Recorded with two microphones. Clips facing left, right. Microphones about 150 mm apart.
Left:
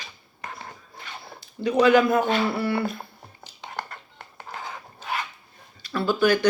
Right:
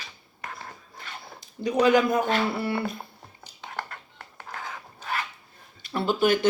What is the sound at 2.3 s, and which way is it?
Speech, 5° left (ahead or behind).